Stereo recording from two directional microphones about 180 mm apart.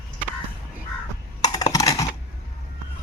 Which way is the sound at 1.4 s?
20° left (ahead or behind).